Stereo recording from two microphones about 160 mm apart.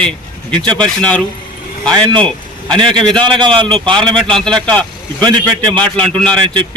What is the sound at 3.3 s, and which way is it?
Speech, 30° right (ahead or behind).